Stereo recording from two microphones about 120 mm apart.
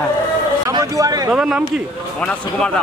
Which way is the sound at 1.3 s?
5° right (ahead or behind).